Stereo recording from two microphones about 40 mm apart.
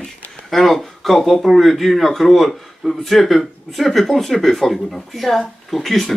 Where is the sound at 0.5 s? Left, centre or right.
Centre.